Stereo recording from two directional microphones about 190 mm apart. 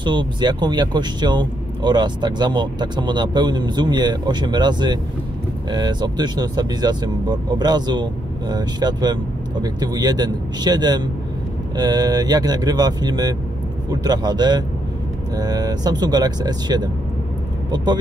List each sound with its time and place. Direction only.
0.0 s speech: 25° right (ahead or behind)